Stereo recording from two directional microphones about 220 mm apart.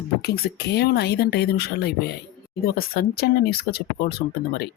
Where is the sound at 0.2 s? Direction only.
45° left (ahead or behind).